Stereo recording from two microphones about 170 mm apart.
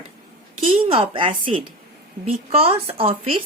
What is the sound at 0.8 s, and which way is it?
A woman's voice, 30° right (ahead or behind).